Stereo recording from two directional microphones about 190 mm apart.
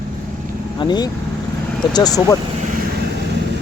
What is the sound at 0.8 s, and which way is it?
Speech, 20° left (ahead or behind).